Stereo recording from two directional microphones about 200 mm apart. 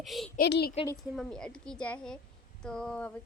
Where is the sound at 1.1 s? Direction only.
5° left (ahead or behind).